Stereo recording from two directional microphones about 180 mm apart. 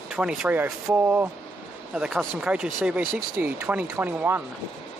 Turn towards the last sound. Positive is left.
turn(degrees=-10)  # may be behind; listen again after turning